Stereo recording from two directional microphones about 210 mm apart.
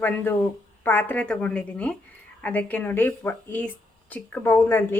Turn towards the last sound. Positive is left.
turn(degrees=10)  # may be behind; listen again after turning